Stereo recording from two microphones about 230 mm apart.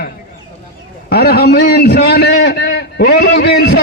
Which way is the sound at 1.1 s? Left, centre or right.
Left.